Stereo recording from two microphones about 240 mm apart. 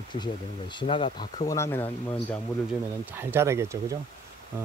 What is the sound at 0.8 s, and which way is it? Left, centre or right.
Speech, left.